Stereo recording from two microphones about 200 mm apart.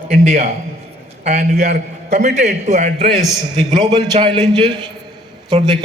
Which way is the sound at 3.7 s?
25° right (ahead or behind).